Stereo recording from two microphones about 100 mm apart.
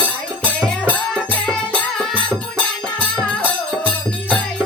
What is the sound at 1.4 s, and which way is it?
Music, 5° left (ahead or behind).